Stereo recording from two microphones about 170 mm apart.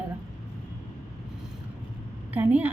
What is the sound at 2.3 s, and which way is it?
Speech, 10° right (ahead or behind).